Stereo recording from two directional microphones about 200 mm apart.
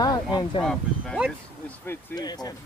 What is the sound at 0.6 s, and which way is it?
Speech, 5° left (ahead or behind).